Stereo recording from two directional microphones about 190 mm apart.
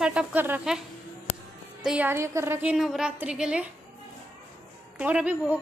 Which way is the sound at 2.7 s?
Centre (ahead or behind).